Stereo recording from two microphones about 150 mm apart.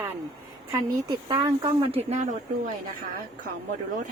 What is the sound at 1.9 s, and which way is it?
Speech, 45° right (ahead or behind).